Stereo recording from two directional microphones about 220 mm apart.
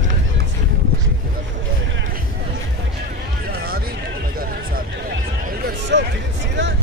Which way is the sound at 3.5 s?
45° right (ahead or behind).